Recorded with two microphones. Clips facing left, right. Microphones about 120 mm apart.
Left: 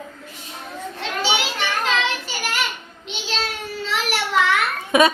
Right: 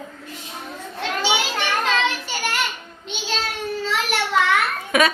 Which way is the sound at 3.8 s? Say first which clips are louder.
Left 1 dB; centre (ahead or behind).